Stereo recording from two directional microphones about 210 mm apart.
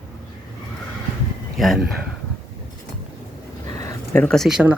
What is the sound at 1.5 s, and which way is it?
Speech, centre (ahead or behind).